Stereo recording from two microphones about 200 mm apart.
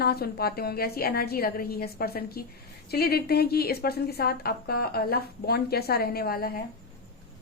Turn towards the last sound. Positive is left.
turn(degrees=50)  # may be behind; listen again after turning